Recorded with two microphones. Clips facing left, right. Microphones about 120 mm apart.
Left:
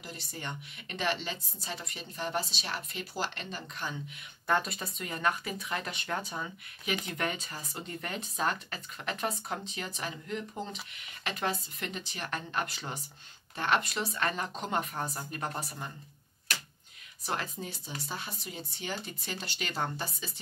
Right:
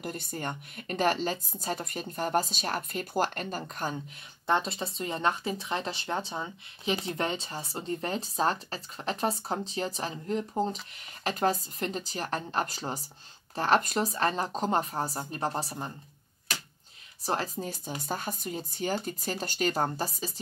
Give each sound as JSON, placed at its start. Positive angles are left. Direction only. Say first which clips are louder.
{"t": 0.0, "sound": "speech", "louder": "right 7 dB", "side_deg": -50}
{"t": 4.5, "sound": "speech", "louder": "right 2 dB", "side_deg": -25}
{"t": 17.2, "sound": "speech", "louder": "right 5 dB", "side_deg": -35}